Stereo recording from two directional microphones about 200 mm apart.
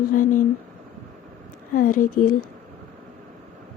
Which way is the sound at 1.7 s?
45° left (ahead or behind).